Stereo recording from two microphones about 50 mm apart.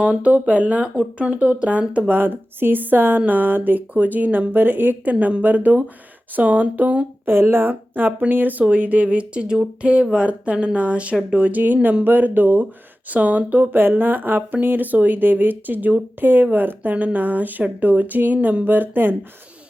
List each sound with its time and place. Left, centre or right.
0.0 s speech: right
2.1 s a woman's voice: right
7.3 s a woman's voice: right
11.6 s a woman's voice: right